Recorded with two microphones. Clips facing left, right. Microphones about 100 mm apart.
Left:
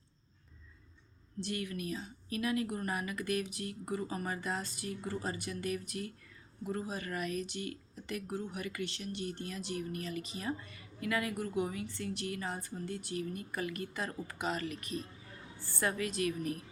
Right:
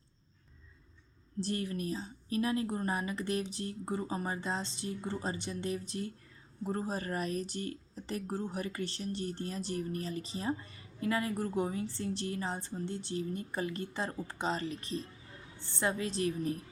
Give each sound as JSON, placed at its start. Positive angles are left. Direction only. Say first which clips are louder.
{"t": 1.4, "sound": "a woman's voice", "louder": "right 3 dB", "side_deg": -35}